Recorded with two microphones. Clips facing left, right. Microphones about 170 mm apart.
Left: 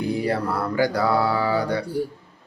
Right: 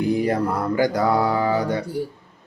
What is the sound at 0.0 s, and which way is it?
Speech, 20° right (ahead or behind).